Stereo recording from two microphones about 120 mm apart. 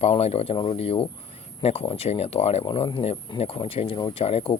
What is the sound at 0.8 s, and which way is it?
A man's voice, 55° left (ahead or behind).